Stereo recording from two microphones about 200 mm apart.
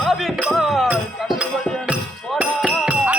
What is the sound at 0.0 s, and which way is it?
Music, centre (ahead or behind).